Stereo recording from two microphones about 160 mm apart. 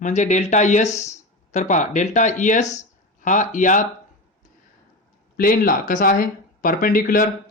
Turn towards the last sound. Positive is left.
turn(degrees=60)  # may be behind; listen again after turning